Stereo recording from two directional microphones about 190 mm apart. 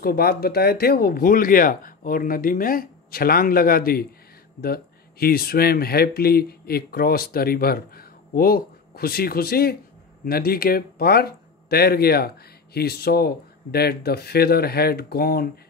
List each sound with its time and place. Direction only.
0.0 s speech: 55° left (ahead or behind)